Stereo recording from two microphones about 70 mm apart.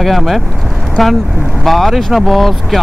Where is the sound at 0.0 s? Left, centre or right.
Centre.